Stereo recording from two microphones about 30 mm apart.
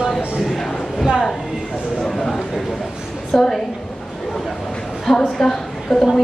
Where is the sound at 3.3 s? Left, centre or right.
Centre.